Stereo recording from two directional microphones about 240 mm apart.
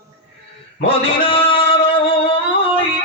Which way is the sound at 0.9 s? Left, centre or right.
Left.